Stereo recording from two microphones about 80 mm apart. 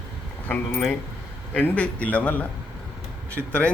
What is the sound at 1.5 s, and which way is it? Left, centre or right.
A man's voice, centre.